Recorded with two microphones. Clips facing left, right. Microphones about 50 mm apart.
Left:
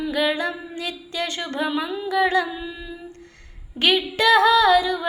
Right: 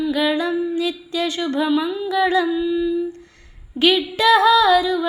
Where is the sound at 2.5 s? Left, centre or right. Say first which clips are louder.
Right 14 dB; left.